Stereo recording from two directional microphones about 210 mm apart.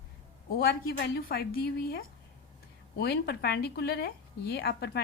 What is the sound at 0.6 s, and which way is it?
Speech, 50° left (ahead or behind).